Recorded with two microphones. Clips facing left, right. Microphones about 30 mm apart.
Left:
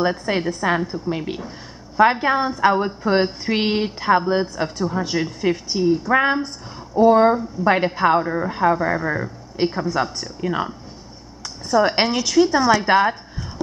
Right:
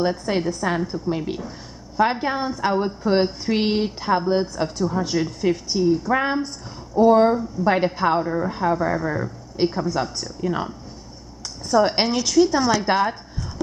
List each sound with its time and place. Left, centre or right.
0.0 s a woman's voice: centre